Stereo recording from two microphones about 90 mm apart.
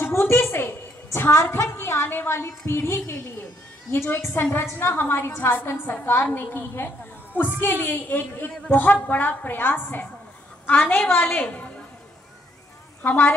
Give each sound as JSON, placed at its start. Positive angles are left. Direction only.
{"t": 0.0, "sound": "a sound", "side_deg": 30}
{"t": 1.3, "sound": "a woman's voice", "side_deg": 35}
{"t": 13.0, "sound": "a woman's voice", "side_deg": 20}